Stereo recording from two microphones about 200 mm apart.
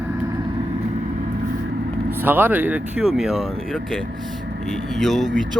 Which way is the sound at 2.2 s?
10° right (ahead or behind).